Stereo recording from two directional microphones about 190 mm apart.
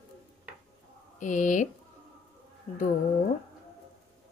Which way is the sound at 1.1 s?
40° left (ahead or behind).